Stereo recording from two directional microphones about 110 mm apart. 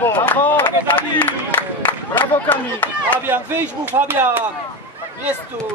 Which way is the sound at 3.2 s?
20° right (ahead or behind).